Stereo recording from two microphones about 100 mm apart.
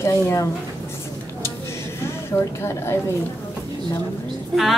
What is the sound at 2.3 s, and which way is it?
Speech, 25° left (ahead or behind).